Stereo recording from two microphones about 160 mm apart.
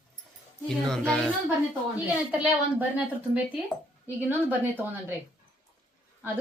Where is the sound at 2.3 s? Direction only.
10° right (ahead or behind).